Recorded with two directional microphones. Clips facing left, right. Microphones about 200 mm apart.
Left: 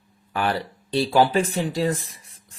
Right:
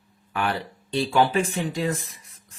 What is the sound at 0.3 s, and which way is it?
Speech, 35° left (ahead or behind).